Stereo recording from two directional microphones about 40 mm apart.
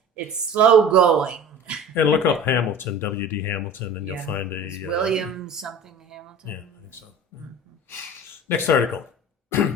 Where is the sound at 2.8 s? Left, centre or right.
Left.